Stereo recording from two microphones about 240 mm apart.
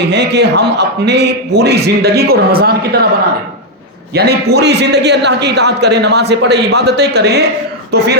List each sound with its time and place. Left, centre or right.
0.1 s a man's voice: right
4.1 s a man's voice: right